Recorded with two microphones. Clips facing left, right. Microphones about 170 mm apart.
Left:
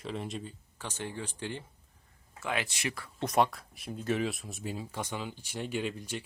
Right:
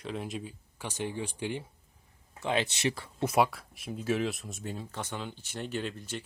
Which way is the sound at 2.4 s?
25° right (ahead or behind).